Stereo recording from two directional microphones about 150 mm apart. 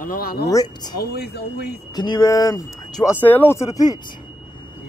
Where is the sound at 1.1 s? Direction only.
90° left.